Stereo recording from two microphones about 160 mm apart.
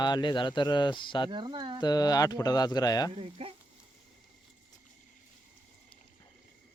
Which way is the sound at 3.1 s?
40° right (ahead or behind).